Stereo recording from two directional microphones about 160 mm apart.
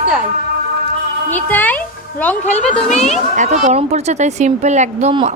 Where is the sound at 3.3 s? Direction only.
50° right (ahead or behind).